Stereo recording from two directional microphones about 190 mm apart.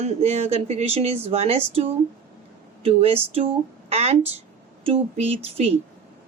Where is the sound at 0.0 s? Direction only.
35° right (ahead or behind).